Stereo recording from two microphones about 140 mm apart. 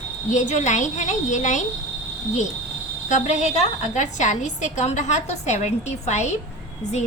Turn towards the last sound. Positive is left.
turn(degrees=55)  # may be behind; listen again after turning